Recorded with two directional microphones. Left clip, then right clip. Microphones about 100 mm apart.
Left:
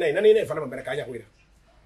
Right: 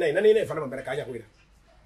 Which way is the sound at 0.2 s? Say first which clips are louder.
Left 3 dB; 5° right (ahead or behind).